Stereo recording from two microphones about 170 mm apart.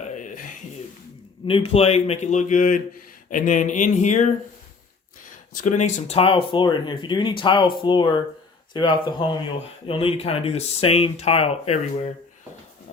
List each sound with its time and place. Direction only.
0.0 s a sound: 45° left (ahead or behind)
1.5 s speech: 35° left (ahead or behind)
5.5 s speech: 45° left (ahead or behind)